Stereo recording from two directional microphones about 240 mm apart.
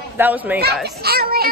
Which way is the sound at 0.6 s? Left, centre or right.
Right.